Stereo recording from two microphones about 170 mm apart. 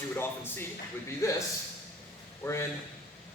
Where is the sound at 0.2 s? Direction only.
10° left (ahead or behind).